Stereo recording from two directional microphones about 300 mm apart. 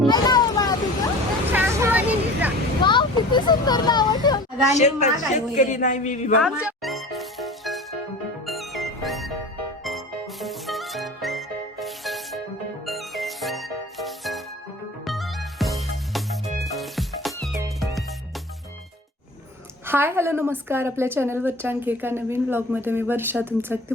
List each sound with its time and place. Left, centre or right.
0.1 s vehicle: centre
1.5 s a sound: centre
2.8 s speech: centre
6.4 s music: centre
10.4 s music: centre
19.9 s a woman's voice: centre